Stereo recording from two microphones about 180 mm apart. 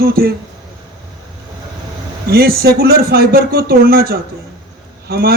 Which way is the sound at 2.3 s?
60° right (ahead or behind).